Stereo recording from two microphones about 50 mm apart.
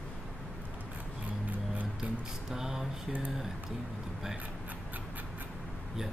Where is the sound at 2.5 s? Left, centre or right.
Centre.